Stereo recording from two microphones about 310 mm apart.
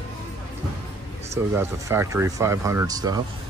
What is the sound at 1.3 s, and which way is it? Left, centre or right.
Speech, centre.